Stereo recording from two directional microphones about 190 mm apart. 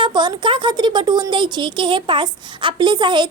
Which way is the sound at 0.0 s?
25° right (ahead or behind).